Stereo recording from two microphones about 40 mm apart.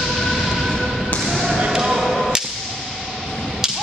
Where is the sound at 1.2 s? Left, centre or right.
Centre.